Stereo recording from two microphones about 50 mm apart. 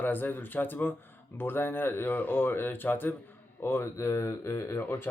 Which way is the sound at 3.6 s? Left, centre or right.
Left.